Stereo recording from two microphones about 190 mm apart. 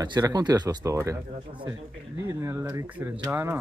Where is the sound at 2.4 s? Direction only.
15° right (ahead or behind).